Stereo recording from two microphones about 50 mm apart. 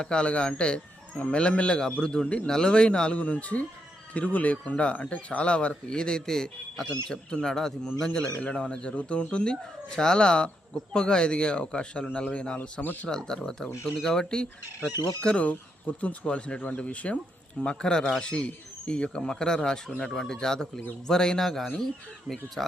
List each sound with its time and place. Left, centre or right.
0.0 s speech: left
12.8 s speech: left
13.1 s speech: centre